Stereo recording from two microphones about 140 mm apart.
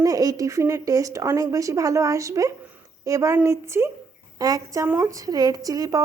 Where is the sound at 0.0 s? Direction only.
25° right (ahead or behind).